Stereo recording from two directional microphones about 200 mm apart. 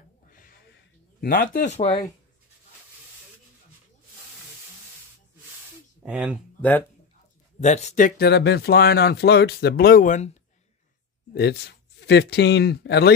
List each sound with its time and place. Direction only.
1.2 s speech: 45° left (ahead or behind)
6.0 s speech: 5° right (ahead or behind)
7.6 s speech: 35° left (ahead or behind)
8.3 s speech: 55° left (ahead or behind); by 10.4 s 35° left (ahead or behind)
11.3 s speech: 55° left (ahead or behind)